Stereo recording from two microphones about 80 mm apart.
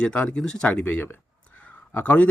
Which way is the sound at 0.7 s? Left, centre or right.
Left.